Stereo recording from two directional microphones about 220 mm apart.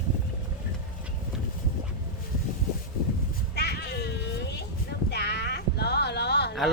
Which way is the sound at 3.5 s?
50° left (ahead or behind).